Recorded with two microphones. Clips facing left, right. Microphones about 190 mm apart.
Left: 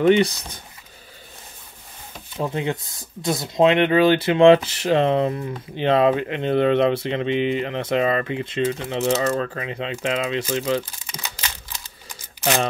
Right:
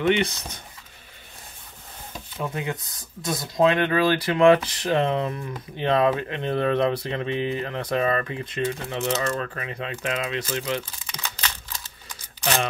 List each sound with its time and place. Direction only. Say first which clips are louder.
0.0 s speech: left 6 dB; 35° left (ahead or behind)
2.3 s speech: left 5 dB; 25° left (ahead or behind)
11.1 s a sound: even; 10° left (ahead or behind)